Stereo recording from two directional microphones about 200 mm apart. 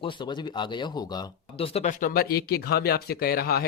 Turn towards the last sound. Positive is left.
turn(degrees=50)  # may be behind; listen again after turning